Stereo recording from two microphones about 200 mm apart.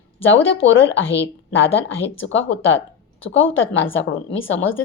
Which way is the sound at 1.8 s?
75° left (ahead or behind).